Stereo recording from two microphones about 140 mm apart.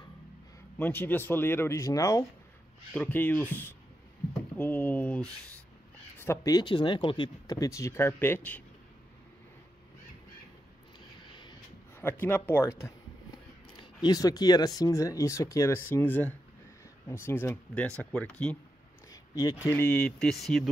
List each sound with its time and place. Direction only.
0.7 s speech: 15° left (ahead or behind)
2.9 s speech: 10° left (ahead or behind); by 7.5 s 35° left (ahead or behind)
7.5 s speech: 20° left (ahead or behind)
12.0 s speech: 15° left (ahead or behind)
13.7 s speech: 30° left (ahead or behind); by 18.6 s 10° left (ahead or behind)
19.0 s speech: 25° left (ahead or behind); by 20.6 s centre (ahead or behind)